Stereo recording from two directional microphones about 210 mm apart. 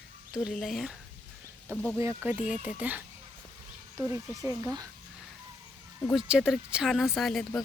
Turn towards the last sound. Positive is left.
turn(degrees=0)  # may be behind; listen again after turning